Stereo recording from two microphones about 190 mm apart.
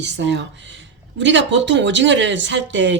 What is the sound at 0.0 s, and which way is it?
Speech, 65° right (ahead or behind).